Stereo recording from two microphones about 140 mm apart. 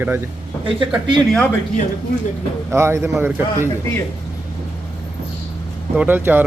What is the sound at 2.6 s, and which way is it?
Speech, 20° right (ahead or behind).